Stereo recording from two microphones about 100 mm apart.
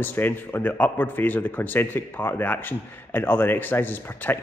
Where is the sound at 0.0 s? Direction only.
20° left (ahead or behind).